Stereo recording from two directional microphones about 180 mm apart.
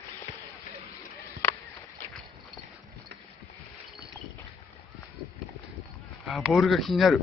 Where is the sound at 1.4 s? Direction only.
10° left (ahead or behind).